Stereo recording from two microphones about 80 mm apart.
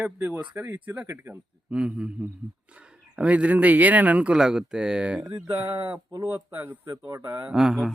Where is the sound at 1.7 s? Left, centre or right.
Centre.